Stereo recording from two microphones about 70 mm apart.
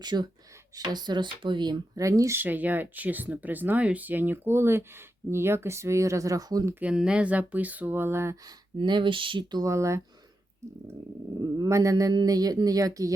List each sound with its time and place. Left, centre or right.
0.0 s speech: right
0.8 s speech: right
2.0 s speech: right
2.4 s speech: right
6.9 s speech: centre; by 8.4 s right
8.7 s speech: right
9.6 s speech: right
11.3 s speech: right
12.1 s speech: right